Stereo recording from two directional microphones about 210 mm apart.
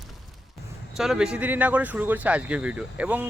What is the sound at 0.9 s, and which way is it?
A man's voice, centre (ahead or behind).